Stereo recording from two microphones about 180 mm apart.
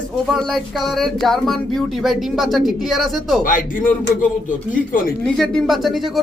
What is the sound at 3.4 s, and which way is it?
Speech, 50° left (ahead or behind).